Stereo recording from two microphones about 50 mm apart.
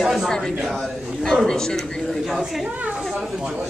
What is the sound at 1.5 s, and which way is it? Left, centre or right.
Speech, centre.